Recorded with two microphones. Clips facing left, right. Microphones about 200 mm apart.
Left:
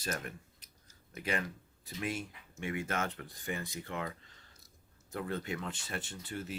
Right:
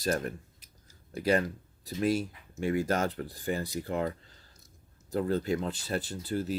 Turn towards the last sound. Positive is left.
turn(degrees=-35)  # may be behind; listen again after turning